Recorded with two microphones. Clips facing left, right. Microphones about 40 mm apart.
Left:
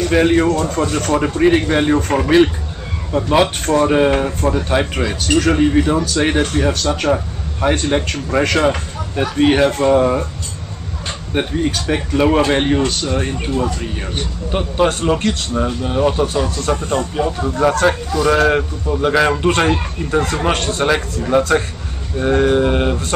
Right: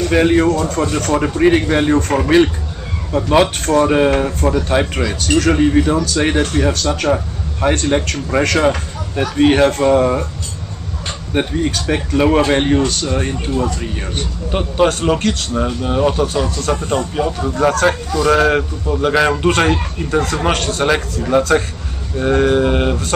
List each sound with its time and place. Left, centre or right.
0.0 s a man's voice: centre
11.3 s a man's voice: centre
16.4 s a man's voice: centre
16.8 s a man's voice: centre
20.5 s a man's voice: centre
20.8 s a man's voice: centre